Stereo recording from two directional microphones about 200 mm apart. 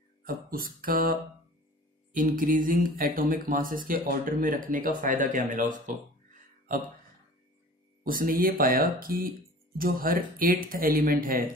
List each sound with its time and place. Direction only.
0.2 s speech: 45° right (ahead or behind)
2.1 s speech: 45° right (ahead or behind)
8.0 s speech: 45° right (ahead or behind)